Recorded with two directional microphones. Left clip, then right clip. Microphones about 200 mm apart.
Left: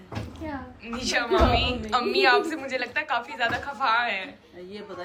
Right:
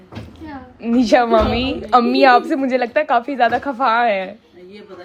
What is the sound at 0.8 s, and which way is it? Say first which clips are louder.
A woman's voice: right 14 dB; 20° right (ahead or behind).